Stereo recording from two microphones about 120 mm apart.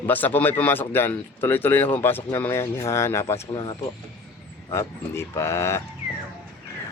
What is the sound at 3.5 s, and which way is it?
Speech, 35° left (ahead or behind).